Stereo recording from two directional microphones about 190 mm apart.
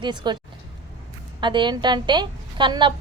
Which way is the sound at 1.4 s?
25° right (ahead or behind).